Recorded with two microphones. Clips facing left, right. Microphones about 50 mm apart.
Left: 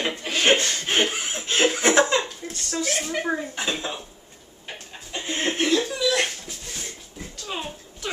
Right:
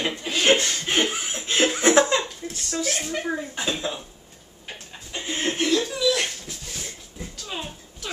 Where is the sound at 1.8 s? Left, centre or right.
Left.